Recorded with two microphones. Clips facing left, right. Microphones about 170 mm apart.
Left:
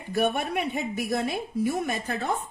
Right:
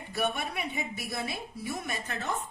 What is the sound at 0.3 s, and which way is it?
A woman's voice, 55° left (ahead or behind).